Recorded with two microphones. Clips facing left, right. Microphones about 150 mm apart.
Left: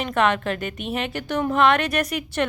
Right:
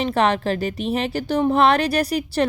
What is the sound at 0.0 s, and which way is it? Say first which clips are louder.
A woman's voice: right 2 dB; 35° right (ahead or behind).